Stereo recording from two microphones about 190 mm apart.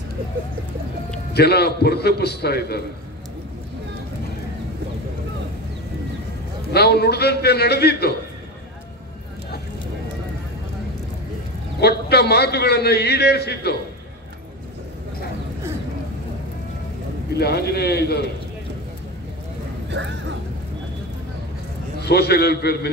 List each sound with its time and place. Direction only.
1.3 s a man's voice: 60° left (ahead or behind)
6.7 s a man's voice: 60° left (ahead or behind)
11.8 s a man's voice: 60° left (ahead or behind)
17.4 s a man's voice: 60° left (ahead or behind)
19.9 s speech: 70° right (ahead or behind)
22.0 s a man's voice: 60° left (ahead or behind)